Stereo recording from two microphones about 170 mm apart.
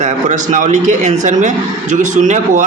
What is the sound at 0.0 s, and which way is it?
A man's voice, 50° right (ahead or behind).